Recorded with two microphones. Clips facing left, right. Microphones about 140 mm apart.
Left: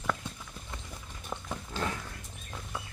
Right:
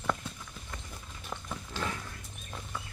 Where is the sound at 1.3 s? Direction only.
15° left (ahead or behind).